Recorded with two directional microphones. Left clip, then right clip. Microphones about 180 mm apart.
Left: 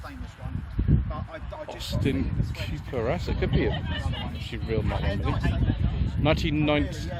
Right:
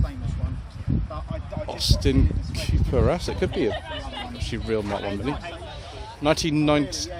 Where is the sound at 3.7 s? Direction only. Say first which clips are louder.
Right 2 dB; 45° right (ahead or behind).